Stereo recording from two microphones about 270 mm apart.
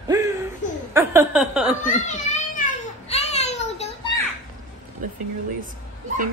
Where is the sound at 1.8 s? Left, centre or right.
Left.